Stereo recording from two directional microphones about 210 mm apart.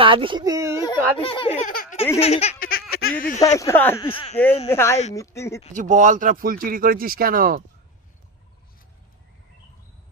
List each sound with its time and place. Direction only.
0.0 s speech: 25° right (ahead or behind)
1.1 s a child's voice: 25° left (ahead or behind)
1.7 s a sound: 45° left (ahead or behind)
2.1 s a child's voice: 30° left (ahead or behind)
2.7 s a sound: 45° left (ahead or behind)
3.3 s speech: 15° left (ahead or behind)
4.0 s a child's voice: 25° left (ahead or behind)
4.6 s speech: 10° left (ahead or behind)
5.7 s speech: 35° right (ahead or behind)